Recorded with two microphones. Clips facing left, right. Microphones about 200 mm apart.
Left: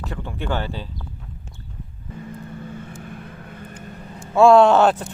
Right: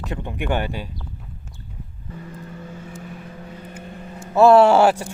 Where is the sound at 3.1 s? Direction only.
55° left (ahead or behind).